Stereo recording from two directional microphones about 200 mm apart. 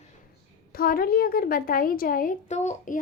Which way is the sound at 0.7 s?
50° left (ahead or behind).